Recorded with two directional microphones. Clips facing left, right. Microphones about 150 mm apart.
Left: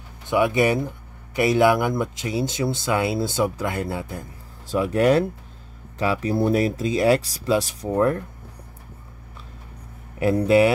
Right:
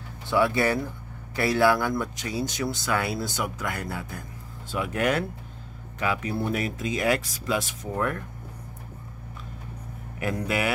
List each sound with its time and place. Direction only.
0.3 s speech: 20° left (ahead or behind)
4.6 s speech: 35° left (ahead or behind)
10.1 s speech: 30° left (ahead or behind)